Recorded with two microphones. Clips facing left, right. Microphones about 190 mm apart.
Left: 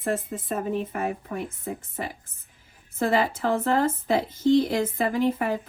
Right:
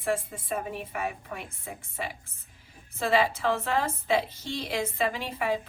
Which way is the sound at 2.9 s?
50° left (ahead or behind).